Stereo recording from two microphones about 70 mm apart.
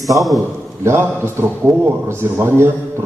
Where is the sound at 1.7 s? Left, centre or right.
Right.